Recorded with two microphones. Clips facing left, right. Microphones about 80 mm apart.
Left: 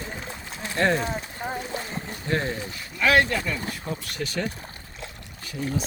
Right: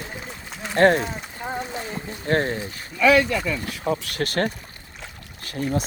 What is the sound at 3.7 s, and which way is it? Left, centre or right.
Speech, right.